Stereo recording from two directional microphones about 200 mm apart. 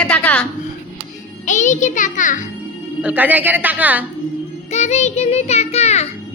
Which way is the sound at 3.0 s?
5° right (ahead or behind).